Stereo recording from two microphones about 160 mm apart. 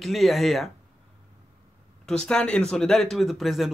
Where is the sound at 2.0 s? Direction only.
5° left (ahead or behind).